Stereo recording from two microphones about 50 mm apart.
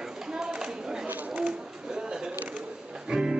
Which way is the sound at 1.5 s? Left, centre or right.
Centre.